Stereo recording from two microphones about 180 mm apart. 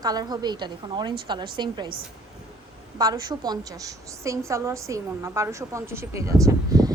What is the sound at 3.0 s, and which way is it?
A woman's voice, 20° right (ahead or behind).